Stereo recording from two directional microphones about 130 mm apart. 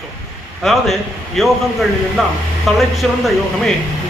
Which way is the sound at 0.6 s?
Centre (ahead or behind).